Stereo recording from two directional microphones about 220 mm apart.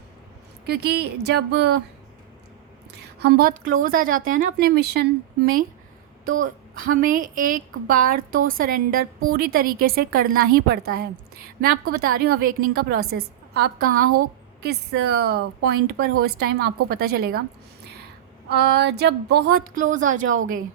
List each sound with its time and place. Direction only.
0.7 s speech: 50° right (ahead or behind)
3.2 s speech: 45° right (ahead or behind)
18.4 s speech: 45° right (ahead or behind)
20.2 s a woman's voice: 65° right (ahead or behind)